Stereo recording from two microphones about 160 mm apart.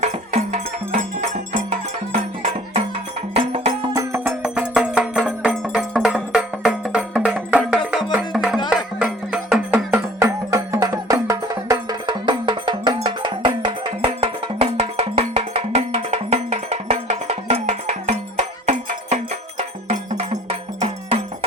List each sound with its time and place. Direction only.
0.0 s music: 45° right (ahead or behind)
2.1 s music: 35° right (ahead or behind)
3.9 s music: 15° right (ahead or behind); by 21.2 s 40° right (ahead or behind)